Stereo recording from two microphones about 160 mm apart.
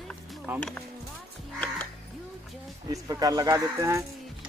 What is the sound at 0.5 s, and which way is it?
Speech, 10° right (ahead or behind).